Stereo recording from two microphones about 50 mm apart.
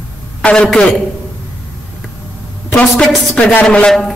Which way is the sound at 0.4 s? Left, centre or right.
Centre.